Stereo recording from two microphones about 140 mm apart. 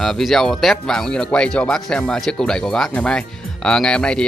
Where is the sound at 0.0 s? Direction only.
Centre (ahead or behind).